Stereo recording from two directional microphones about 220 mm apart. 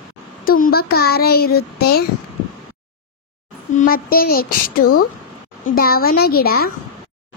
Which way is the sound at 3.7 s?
40° left (ahead or behind).